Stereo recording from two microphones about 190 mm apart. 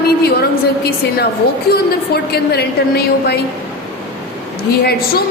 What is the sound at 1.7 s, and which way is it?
A woman's voice, 55° left (ahead or behind).